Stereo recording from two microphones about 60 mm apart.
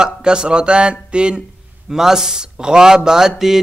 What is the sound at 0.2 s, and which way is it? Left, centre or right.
A man's voice, centre.